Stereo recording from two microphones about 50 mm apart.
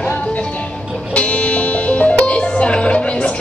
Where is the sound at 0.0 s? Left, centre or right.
Left.